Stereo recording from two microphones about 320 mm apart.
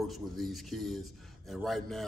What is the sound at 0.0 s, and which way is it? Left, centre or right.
A man's voice, centre.